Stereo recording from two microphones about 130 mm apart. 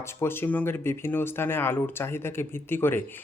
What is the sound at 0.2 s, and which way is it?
Speech, 15° left (ahead or behind).